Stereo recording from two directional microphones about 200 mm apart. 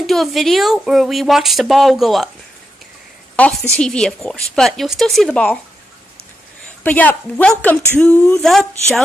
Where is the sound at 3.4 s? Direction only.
5° left (ahead or behind).